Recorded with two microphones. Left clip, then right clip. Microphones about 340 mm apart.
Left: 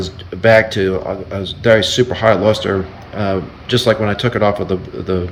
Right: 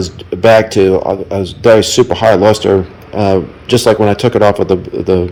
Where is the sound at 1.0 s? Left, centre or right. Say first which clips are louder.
Right 7 dB; centre.